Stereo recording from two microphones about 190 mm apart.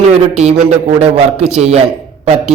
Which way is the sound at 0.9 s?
35° right (ahead or behind).